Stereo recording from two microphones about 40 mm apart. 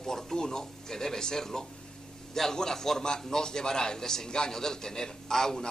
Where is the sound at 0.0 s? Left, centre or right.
Centre.